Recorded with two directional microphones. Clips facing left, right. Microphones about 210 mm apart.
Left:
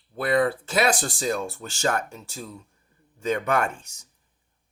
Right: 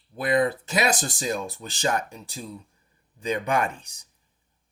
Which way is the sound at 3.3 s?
15° right (ahead or behind).